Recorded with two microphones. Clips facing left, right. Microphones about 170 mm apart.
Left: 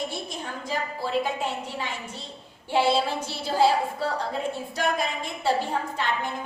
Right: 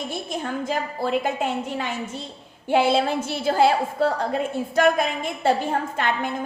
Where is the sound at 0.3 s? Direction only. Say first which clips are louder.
Right 6 dB; 55° right (ahead or behind).